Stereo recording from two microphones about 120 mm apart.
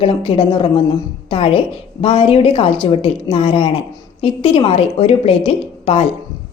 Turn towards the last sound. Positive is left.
turn(degrees=55)  # may be behind; listen again after turning